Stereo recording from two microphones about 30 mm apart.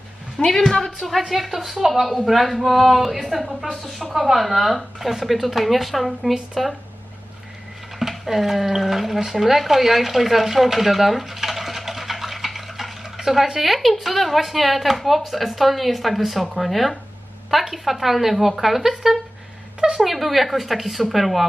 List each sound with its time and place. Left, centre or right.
0.3 s a woman's voice: centre
0.9 s speech: centre
7.9 s a woman's voice: centre